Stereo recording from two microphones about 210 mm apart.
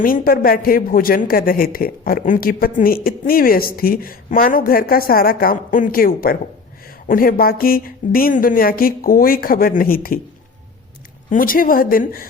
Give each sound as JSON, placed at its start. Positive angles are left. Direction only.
{"t": 0.0, "sound": "a woman's voice", "side_deg": 45}
{"t": 11.3, "sound": "a woman's voice", "side_deg": 40}